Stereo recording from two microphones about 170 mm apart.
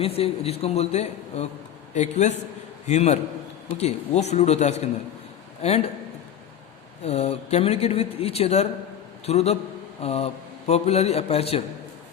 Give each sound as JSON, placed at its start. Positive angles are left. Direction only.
{"t": 0.0, "sound": "a man's voice", "side_deg": 35}
{"t": 7.0, "sound": "speech", "side_deg": 40}